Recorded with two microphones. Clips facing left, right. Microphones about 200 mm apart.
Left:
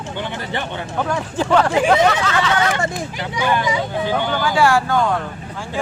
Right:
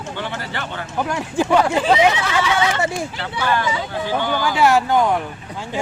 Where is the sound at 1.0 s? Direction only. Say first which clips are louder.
Right 1 dB; 10° right (ahead or behind).